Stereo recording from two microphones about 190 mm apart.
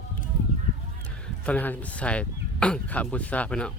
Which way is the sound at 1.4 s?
10° left (ahead or behind).